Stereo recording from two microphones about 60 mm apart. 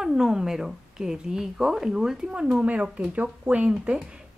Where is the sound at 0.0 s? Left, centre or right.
Centre.